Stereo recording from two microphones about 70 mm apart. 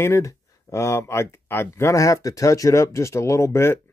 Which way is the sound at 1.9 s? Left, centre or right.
Left.